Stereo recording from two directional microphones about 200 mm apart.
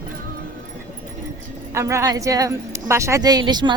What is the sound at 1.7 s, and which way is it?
A woman's voice, 15° right (ahead or behind).